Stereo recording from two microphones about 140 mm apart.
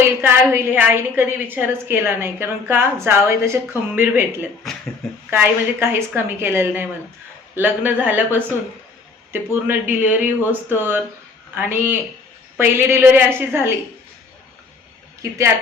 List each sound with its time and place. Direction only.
0.0 s a woman's voice: 15° right (ahead or behind)